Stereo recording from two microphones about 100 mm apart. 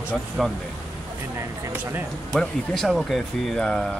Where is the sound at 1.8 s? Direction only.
20° right (ahead or behind).